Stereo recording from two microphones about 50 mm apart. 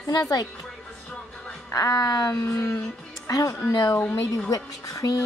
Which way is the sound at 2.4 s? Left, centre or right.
Left.